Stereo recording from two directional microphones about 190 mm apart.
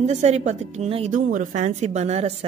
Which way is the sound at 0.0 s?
35° right (ahead or behind).